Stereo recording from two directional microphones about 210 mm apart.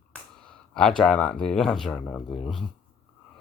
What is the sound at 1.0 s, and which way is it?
Speech, 5° left (ahead or behind).